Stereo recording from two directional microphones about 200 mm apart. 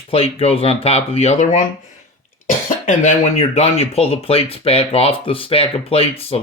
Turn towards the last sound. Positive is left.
turn(degrees=30)  # may be behind; listen again after turning